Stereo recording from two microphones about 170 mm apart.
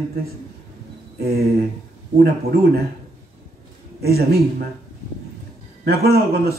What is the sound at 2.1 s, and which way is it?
Speech, 65° right (ahead or behind).